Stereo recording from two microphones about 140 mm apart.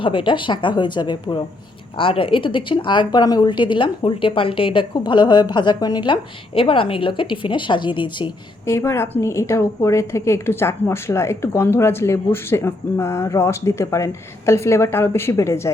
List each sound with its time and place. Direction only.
0.0 s a woman's voice: 35° left (ahead or behind)
8.6 s a woman's voice: 20° left (ahead or behind)